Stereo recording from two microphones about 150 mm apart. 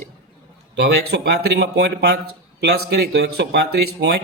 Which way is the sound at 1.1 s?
90° right.